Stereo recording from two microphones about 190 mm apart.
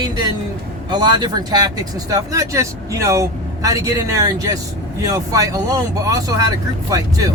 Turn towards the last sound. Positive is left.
turn(degrees=-20)  # may be behind; listen again after turning